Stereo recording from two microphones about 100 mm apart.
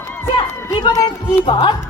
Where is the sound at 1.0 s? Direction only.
50° left (ahead or behind).